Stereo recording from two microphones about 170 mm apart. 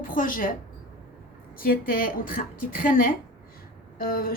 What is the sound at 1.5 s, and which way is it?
A woman's voice, 60° left (ahead or behind).